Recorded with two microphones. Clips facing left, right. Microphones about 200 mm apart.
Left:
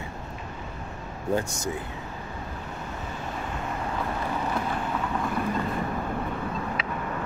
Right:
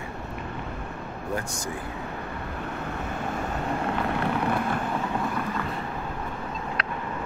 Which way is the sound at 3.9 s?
65° right (ahead or behind).